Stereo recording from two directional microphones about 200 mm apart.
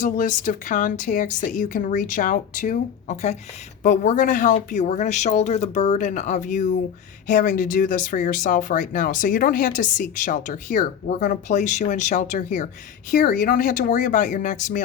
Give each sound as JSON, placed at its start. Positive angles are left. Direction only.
{"t": 0.0, "sound": "speech", "side_deg": 40}